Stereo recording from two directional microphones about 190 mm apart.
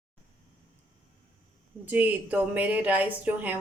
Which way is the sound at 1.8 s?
10° right (ahead or behind).